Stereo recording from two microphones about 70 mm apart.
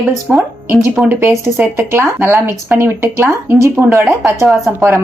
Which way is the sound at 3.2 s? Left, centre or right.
Right.